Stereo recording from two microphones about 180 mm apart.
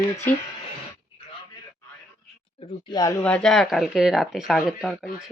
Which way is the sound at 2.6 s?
25° left (ahead or behind).